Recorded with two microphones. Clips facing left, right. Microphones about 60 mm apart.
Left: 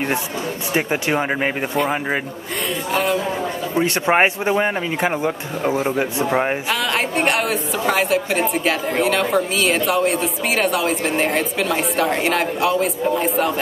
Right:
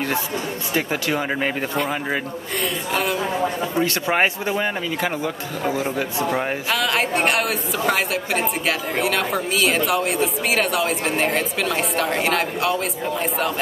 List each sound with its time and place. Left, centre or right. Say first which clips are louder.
0.7 s speech: left 3 dB; left
2.9 s a woman's voice: left 4 dB; centre
3.7 s speech: left 7 dB; left
6.7 s a woman's voice: even; centre